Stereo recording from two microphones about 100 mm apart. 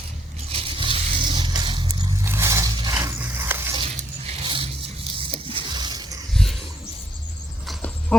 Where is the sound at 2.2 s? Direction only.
25° right (ahead or behind).